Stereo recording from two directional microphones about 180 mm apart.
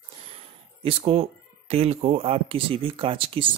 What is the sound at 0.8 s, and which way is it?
Speech, 30° right (ahead or behind).